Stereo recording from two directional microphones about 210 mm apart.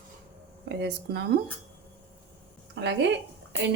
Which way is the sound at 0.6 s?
55° right (ahead or behind).